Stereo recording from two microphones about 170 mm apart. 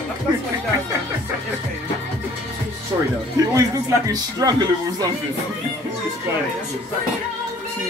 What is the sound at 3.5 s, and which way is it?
Speech, 20° right (ahead or behind).